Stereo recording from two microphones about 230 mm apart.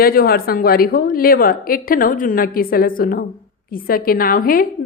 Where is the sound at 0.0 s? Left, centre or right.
Left.